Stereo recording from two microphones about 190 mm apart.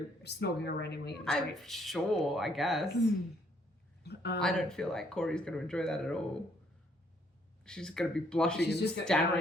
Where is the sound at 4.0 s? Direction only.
60° left (ahead or behind).